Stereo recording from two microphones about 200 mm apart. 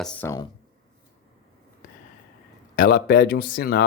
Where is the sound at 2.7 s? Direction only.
45° left (ahead or behind).